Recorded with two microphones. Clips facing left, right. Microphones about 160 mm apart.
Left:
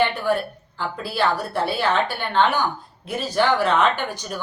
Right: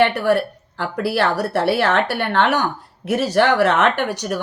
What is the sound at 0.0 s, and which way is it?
A woman's voice, 75° right (ahead or behind).